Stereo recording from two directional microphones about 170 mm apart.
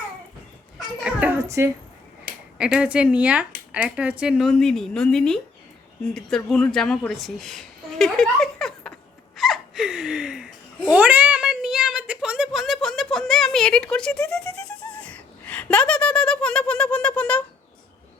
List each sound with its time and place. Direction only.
1.0 s a child's voice: 10° right (ahead or behind)
2.7 s a woman's voice: 5° right (ahead or behind)
9.3 s laughter: centre (ahead or behind)
14.8 s speech: 10° left (ahead or behind)